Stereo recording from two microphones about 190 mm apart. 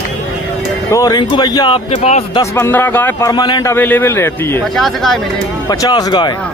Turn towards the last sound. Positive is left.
turn(degrees=25)  # may be behind; listen again after turning